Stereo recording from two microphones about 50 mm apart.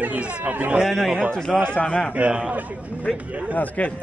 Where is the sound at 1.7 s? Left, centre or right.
Left.